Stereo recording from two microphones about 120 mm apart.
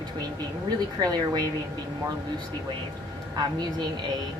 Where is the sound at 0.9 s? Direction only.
30° right (ahead or behind).